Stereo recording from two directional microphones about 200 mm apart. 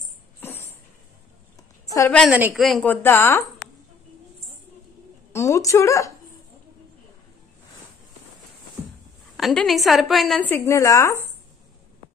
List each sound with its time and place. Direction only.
0.4 s a sound: 10° left (ahead or behind)
2.0 s a woman's voice: 5° left (ahead or behind)
5.3 s a woman's voice: 15° left (ahead or behind)
9.4 s a woman's voice: centre (ahead or behind)
10.5 s a woman's voice: 15° left (ahead or behind)